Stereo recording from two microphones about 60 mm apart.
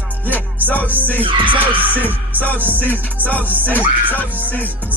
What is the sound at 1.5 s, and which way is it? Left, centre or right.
Music, right.